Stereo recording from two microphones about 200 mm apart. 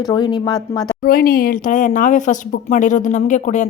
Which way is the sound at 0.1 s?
20° left (ahead or behind).